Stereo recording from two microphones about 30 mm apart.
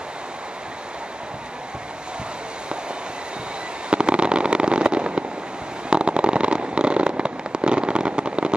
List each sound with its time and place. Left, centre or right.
3.9 s fireworks: right